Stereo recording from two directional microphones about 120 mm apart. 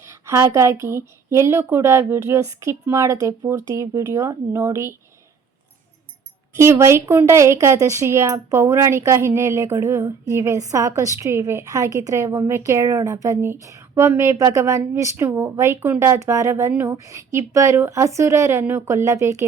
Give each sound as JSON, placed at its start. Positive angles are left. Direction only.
{"t": 0.0, "sound": "a woman's voice", "side_deg": -25}
{"t": 6.6, "sound": "a woman's voice", "side_deg": -25}